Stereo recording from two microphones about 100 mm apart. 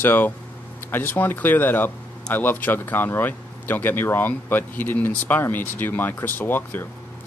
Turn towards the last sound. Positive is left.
turn(degrees=20)  # may be behind; listen again after turning